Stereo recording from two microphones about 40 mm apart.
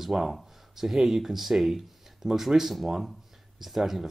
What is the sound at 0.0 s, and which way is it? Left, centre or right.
Speech, centre.